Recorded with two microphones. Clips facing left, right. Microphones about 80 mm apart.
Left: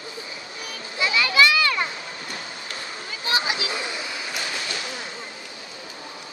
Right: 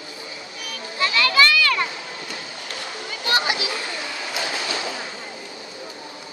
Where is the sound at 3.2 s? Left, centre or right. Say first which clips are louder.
Right 3 dB; right.